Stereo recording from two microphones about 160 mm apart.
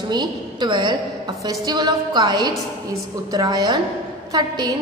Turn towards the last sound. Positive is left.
turn(degrees=-25)  # may be behind; listen again after turning